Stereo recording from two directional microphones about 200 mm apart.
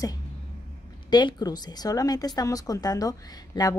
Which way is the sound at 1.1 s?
20° left (ahead or behind).